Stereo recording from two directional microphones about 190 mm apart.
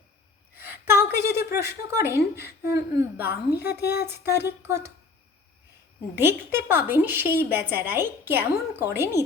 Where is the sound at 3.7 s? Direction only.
60° left (ahead or behind).